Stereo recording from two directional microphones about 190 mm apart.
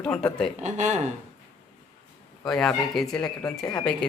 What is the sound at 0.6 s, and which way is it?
Speech, 40° right (ahead or behind).